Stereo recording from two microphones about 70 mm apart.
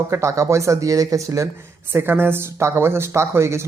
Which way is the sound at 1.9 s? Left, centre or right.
Right.